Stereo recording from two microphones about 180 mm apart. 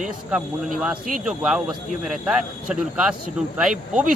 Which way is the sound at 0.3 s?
5° right (ahead or behind).